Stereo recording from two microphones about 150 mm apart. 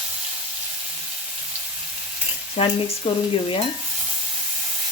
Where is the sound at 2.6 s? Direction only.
35° left (ahead or behind).